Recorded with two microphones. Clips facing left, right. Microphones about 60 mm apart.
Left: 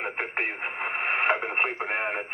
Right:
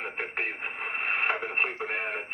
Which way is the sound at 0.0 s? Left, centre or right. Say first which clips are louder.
Left 3 dB; left.